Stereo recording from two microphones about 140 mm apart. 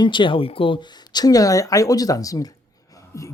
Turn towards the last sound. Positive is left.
turn(degrees=20)  # may be behind; listen again after turning